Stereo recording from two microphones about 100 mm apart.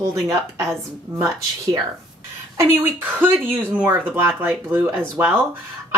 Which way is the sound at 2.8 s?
20° right (ahead or behind).